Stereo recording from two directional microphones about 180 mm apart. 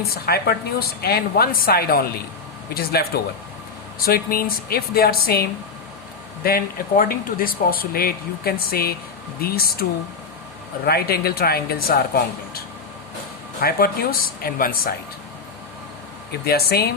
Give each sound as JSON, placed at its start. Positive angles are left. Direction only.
{"t": 0.1, "sound": "speech", "side_deg": 60}
{"t": 10.8, "sound": "speech", "side_deg": 60}
{"t": 16.5, "sound": "speech", "side_deg": 60}